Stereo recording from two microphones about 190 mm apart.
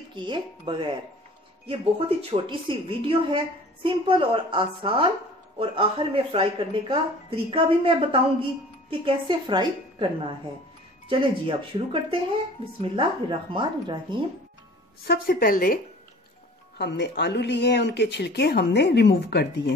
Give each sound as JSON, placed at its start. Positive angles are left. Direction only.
{"t": 0.1, "sound": "a woman's voice", "side_deg": -25}
{"t": 11.1, "sound": "a woman's voice", "side_deg": -25}
{"t": 15.0, "sound": "a woman's voice", "side_deg": 50}
{"t": 16.7, "sound": "speech", "side_deg": 65}